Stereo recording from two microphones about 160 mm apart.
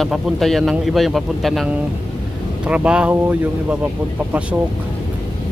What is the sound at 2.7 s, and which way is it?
Speech, 5° right (ahead or behind).